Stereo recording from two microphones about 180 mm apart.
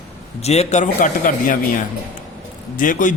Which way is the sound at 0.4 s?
35° left (ahead or behind).